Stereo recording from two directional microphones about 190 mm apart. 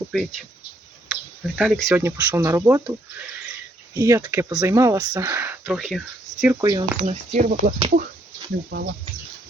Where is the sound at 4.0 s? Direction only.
20° right (ahead or behind); by 6.5 s centre (ahead or behind).